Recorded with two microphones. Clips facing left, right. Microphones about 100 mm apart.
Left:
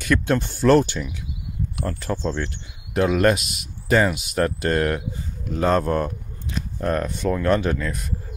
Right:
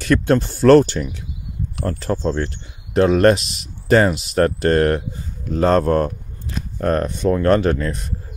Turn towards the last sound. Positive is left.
turn(degrees=-45)  # may be behind; listen again after turning